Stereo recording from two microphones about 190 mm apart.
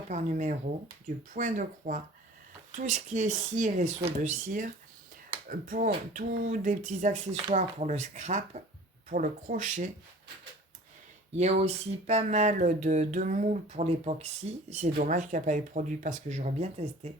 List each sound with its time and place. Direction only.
0.1 s speech: 40° right (ahead or behind)
11.3 s speech: 35° right (ahead or behind)